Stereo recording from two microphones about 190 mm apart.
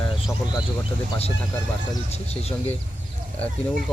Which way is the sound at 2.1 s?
35° left (ahead or behind).